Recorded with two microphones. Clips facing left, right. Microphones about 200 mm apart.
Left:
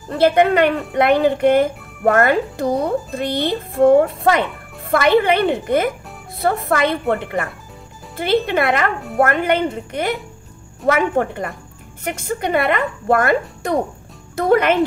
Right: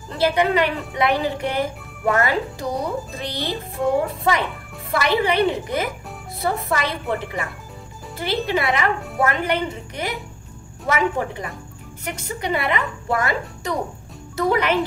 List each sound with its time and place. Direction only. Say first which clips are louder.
0.1 s a woman's voice: left 5 dB; 55° left (ahead or behind)
4.9 s a woman's voice: left 5 dB; 55° left (ahead or behind)